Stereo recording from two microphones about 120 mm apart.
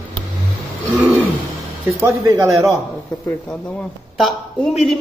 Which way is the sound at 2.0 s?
25° right (ahead or behind).